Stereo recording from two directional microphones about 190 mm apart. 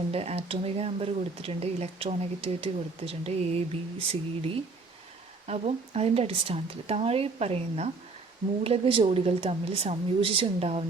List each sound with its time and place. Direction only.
0.1 s speech: 30° right (ahead or behind)